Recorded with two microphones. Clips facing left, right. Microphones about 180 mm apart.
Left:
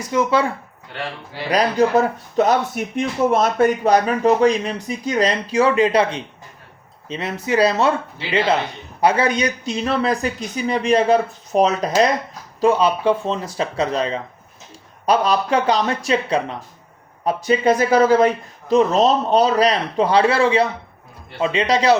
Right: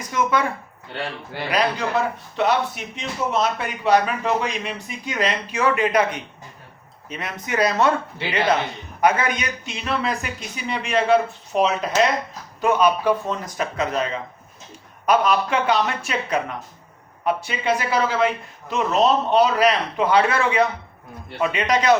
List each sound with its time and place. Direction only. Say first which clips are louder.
0.1 s speech: left 4 dB; 30° left (ahead or behind)
2.3 s speech: left 4 dB; 40° left (ahead or behind)
12.5 s speech: left 2 dB; 30° left (ahead or behind)